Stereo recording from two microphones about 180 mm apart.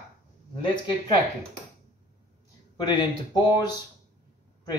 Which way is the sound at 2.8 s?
25° left (ahead or behind).